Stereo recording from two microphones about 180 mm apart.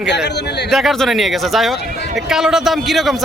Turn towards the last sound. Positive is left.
turn(degrees=0)  # may be behind; listen again after turning